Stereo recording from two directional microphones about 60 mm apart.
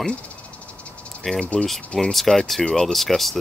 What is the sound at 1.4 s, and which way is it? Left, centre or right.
Speech, left.